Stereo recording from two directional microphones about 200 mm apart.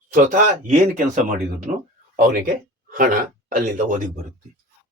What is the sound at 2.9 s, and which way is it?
Speech, 40° right (ahead or behind).